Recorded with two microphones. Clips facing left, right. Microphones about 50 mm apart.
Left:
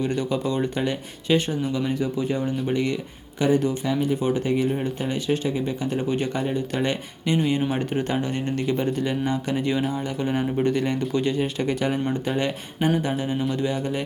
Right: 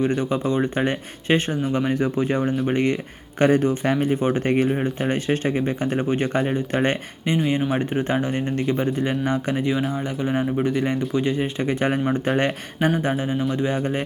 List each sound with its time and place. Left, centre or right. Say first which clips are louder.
0.2 s speech: right 2 dB; right
4.7 s speech: right 3 dB; right
8.6 s speech: right 1 dB; centre
9.0 s speech: right 2 dB; right
10.2 s speech: right 2 dB; centre
12.3 s speech: right 4 dB; right
13.0 s speech: right 2 dB; right